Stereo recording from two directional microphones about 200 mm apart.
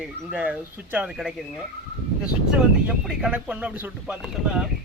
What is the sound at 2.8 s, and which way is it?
A man's voice, 5° right (ahead or behind).